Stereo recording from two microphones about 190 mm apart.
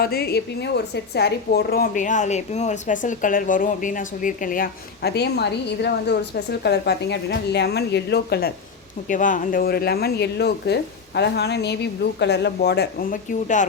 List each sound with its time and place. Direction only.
0.0 s a woman's voice: 55° left (ahead or behind)
9.0 s speech: 45° left (ahead or behind)